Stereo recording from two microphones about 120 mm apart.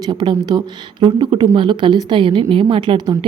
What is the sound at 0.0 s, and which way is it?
Speech, 40° right (ahead or behind).